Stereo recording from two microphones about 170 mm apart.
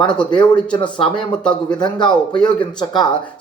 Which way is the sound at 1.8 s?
25° left (ahead or behind).